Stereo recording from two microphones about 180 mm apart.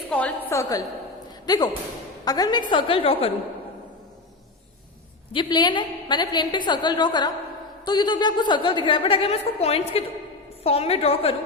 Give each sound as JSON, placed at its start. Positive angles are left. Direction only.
{"t": 0.1, "sound": "a sound", "side_deg": 5}
{"t": 1.5, "sound": "a woman's voice", "side_deg": 20}
{"t": 5.3, "sound": "a woman's voice", "side_deg": 25}